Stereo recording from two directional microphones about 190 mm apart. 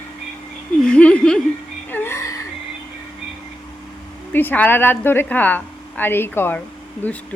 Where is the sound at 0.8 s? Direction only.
5° left (ahead or behind).